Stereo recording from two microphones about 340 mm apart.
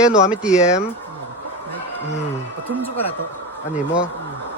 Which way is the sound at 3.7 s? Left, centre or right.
Centre.